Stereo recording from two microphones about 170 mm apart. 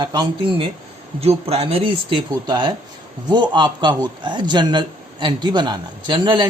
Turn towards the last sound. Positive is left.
turn(degrees=-25)  # may be behind; listen again after turning